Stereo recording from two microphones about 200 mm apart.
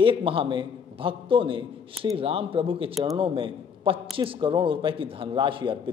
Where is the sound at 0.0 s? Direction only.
25° right (ahead or behind).